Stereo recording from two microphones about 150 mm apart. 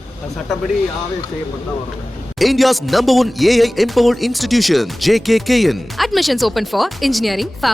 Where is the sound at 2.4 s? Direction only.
Centre (ahead or behind).